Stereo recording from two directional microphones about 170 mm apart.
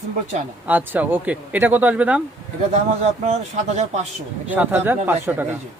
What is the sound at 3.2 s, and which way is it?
Speech, 40° right (ahead or behind).